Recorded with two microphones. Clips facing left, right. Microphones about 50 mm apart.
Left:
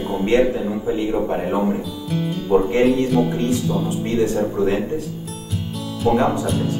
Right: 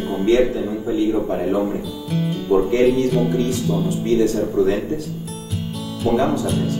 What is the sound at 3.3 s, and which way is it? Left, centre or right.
Speech, left.